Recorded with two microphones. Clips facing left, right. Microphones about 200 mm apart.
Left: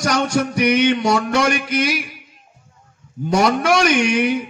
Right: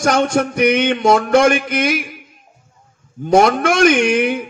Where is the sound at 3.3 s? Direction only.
50° right (ahead or behind).